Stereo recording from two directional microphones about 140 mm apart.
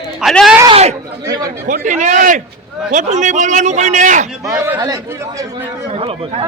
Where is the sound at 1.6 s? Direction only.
70° right (ahead or behind).